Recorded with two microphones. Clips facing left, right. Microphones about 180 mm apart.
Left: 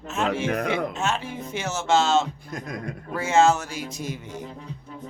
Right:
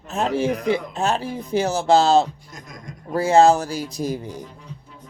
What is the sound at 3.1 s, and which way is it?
Speech, 35° right (ahead or behind).